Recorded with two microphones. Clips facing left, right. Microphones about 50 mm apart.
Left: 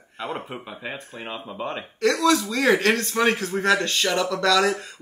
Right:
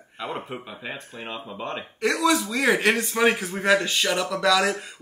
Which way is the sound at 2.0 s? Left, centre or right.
Centre.